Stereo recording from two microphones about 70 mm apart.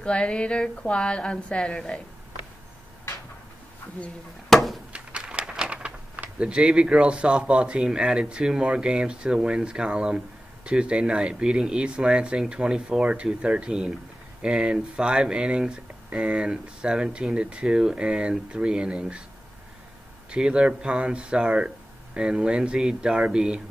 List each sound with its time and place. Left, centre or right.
0.0 s a woman's voice: centre
4.5 s a sound: centre
4.9 s speech: centre
20.2 s speech: centre